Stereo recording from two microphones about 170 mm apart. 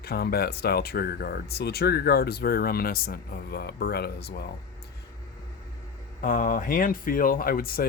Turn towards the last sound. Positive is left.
turn(degrees=60)  # may be behind; listen again after turning